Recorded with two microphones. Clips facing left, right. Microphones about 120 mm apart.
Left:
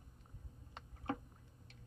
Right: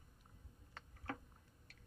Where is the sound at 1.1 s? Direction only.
20° left (ahead or behind).